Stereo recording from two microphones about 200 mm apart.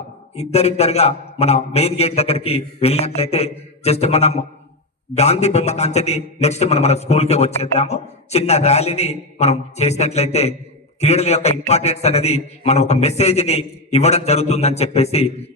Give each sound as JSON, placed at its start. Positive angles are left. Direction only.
{"t": 0.3, "sound": "a man's voice", "side_deg": 30}